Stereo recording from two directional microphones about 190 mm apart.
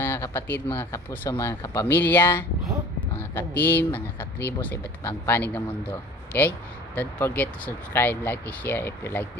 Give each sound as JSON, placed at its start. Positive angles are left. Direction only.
{"t": 0.0, "sound": "speech", "side_deg": 10}